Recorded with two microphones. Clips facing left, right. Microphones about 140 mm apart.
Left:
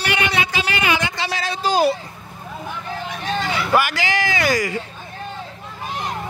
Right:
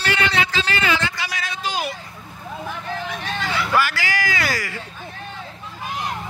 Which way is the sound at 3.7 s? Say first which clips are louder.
Left 3 dB; 20° left (ahead or behind).